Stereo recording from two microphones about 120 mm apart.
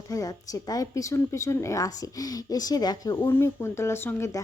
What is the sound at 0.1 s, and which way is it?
A woman's voice, 30° left (ahead or behind).